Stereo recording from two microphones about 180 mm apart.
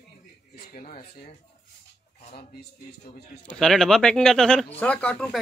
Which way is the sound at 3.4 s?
5° left (ahead or behind).